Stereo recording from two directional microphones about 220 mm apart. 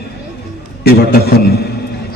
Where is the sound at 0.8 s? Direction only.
45° left (ahead or behind).